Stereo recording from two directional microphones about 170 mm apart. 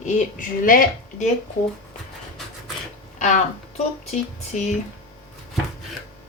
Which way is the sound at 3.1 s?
45° left (ahead or behind).